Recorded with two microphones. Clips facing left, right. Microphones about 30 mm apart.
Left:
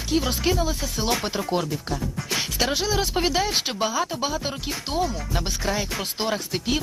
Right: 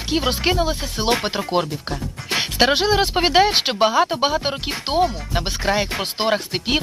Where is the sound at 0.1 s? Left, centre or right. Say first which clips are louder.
Right 3 dB; right.